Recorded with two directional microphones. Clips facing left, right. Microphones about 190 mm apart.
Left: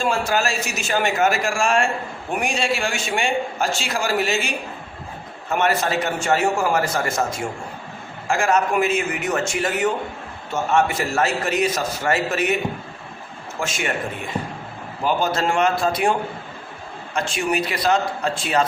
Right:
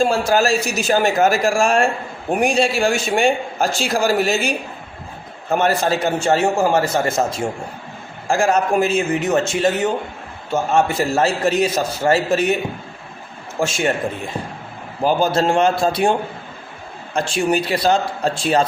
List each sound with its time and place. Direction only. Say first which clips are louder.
0.0 s a man's voice: right 5 dB; 35° right (ahead or behind)
15.0 s a man's voice: right 4 dB; 30° right (ahead or behind)
17.2 s a man's voice: right 4 dB; 30° right (ahead or behind)